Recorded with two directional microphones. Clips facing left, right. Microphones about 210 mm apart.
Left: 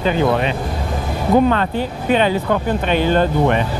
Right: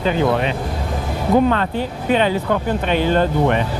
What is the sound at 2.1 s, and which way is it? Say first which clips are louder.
Speech: left 1 dB; 15° left (ahead or behind).